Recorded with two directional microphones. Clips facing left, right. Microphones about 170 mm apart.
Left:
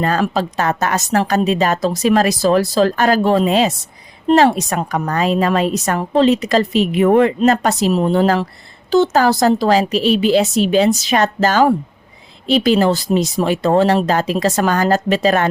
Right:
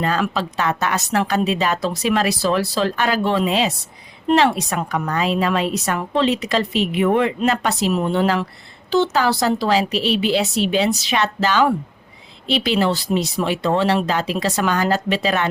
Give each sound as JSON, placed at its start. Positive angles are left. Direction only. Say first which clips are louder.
{"t": 0.0, "sound": "a woman's voice", "louder": "left 4 dB", "side_deg": 45}